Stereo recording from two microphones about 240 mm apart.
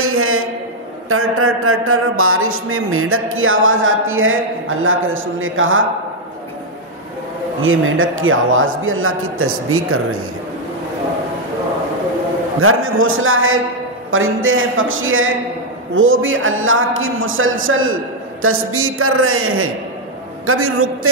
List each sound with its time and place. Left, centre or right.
0.0 s a sound: right
1.0 s speech: right
7.6 s speech: right
12.5 s speech: right